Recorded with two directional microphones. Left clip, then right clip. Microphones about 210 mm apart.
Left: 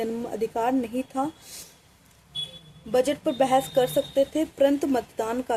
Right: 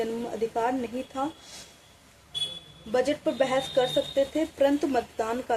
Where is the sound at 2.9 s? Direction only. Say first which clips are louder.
Left 2 dB; 45° left (ahead or behind).